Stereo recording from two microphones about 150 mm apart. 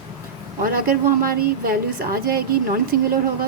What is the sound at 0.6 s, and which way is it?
A woman's voice, 75° right (ahead or behind).